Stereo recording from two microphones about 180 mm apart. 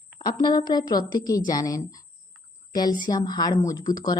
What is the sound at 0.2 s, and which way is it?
A woman's voice, 25° left (ahead or behind).